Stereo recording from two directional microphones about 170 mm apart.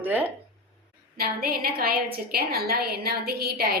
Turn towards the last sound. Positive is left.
turn(degrees=-65)  # may be behind; listen again after turning